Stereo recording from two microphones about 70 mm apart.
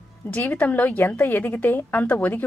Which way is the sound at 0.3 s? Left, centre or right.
Left.